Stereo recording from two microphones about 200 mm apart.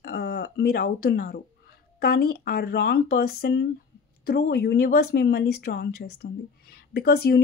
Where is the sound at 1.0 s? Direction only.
50° left (ahead or behind).